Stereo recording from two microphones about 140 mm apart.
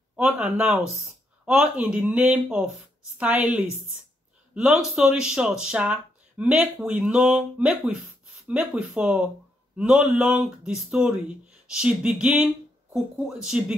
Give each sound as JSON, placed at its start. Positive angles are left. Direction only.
{"t": 0.1, "sound": "speech", "side_deg": -10}